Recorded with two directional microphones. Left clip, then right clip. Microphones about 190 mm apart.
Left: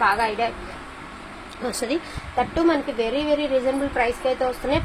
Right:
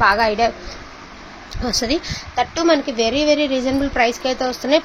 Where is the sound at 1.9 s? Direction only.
55° right (ahead or behind).